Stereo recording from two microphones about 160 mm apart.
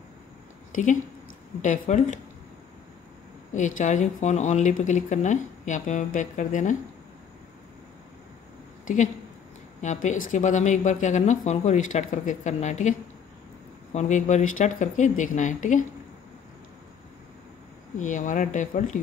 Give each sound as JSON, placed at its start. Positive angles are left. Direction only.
{"t": 0.7, "sound": "a sound", "side_deg": 55}
{"t": 1.6, "sound": "speech", "side_deg": 50}
{"t": 3.5, "sound": "speech", "side_deg": 50}
{"t": 8.8, "sound": "a woman's voice", "side_deg": 50}
{"t": 13.9, "sound": "speech", "side_deg": 50}
{"t": 17.9, "sound": "speech", "side_deg": 50}